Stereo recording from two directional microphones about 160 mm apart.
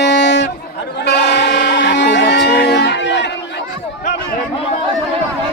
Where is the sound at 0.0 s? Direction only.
90° left.